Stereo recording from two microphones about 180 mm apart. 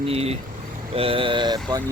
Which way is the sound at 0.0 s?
35° right (ahead or behind).